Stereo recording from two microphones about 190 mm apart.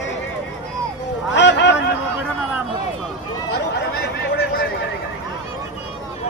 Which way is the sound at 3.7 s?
60° left (ahead or behind).